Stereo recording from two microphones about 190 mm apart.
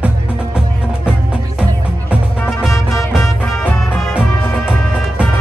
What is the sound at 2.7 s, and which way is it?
Music, 15° left (ahead or behind).